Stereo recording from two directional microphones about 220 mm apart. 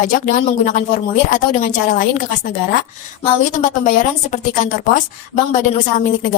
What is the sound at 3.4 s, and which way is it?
A woman's voice, 35° left (ahead or behind).